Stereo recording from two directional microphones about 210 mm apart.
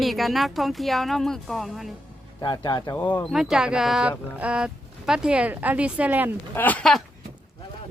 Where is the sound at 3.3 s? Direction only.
Centre (ahead or behind).